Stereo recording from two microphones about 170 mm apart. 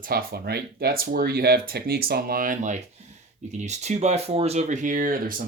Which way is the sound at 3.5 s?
45° right (ahead or behind).